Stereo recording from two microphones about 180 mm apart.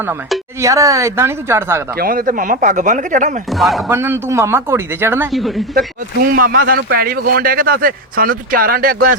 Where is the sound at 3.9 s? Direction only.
10° right (ahead or behind).